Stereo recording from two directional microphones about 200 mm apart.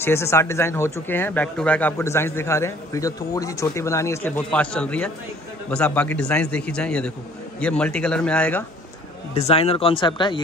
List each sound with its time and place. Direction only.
0.0 s a man's voice: 15° left (ahead or behind)
9.3 s speech: 30° left (ahead or behind)